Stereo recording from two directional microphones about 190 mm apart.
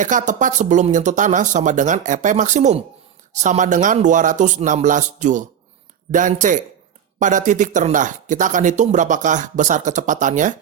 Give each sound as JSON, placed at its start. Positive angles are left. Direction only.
{"t": 0.0, "sound": "speech", "side_deg": -40}